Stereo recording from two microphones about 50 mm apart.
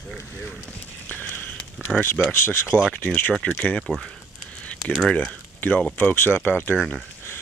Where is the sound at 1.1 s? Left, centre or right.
Left.